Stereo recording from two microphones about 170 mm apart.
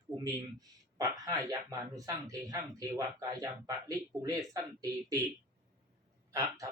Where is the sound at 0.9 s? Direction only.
20° right (ahead or behind).